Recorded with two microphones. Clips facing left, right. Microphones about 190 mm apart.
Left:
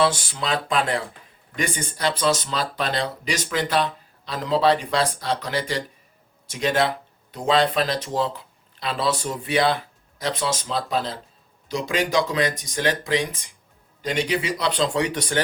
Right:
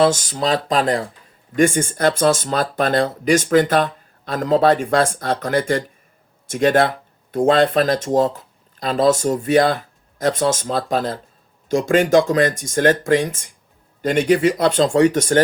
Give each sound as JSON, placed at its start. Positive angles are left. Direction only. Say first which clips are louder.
{"t": 0.0, "sound": "speech", "louder": "right 6 dB", "side_deg": -45}